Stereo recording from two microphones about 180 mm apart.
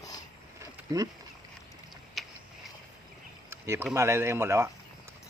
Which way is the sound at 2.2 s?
Centre (ahead or behind).